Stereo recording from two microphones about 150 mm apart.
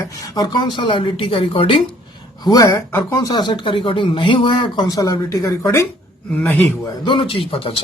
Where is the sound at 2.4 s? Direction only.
25° left (ahead or behind).